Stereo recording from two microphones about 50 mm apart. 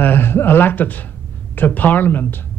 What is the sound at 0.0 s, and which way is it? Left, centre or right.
Speech, left.